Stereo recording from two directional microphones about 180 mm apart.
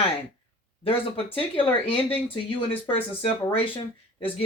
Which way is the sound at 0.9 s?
30° left (ahead or behind).